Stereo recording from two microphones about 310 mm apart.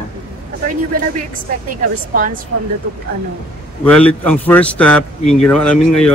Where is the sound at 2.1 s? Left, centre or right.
Right.